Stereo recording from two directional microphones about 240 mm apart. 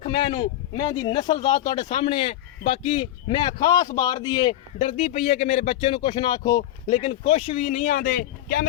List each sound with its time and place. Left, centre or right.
0.0 s speech: centre; by 8.6 s left